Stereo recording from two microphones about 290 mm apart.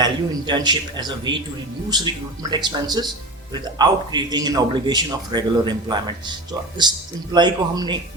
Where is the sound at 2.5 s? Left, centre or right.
Centre.